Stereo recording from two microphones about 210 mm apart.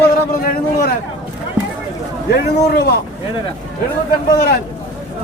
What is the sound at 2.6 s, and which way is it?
Speech, 50° left (ahead or behind).